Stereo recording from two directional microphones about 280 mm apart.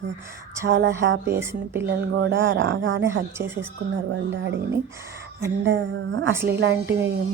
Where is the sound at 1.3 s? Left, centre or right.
Centre.